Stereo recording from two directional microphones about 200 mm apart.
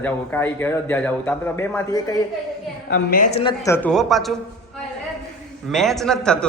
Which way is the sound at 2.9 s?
45° left (ahead or behind).